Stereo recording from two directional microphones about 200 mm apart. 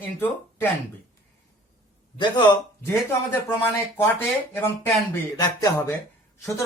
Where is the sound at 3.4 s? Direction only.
10° left (ahead or behind).